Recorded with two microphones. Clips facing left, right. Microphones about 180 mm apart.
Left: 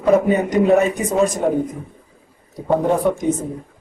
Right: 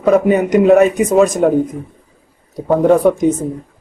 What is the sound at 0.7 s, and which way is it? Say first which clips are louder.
Speech: right 6 dB; 75° right (ahead or behind).